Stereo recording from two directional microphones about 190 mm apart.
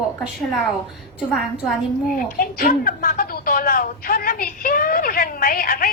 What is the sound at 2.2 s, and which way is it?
A woman's voice, 50° left (ahead or behind).